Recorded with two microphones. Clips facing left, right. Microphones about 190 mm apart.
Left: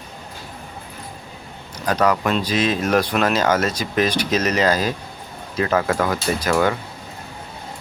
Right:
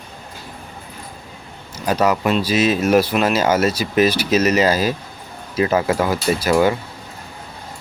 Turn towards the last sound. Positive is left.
turn(degrees=-10)  # may be behind; listen again after turning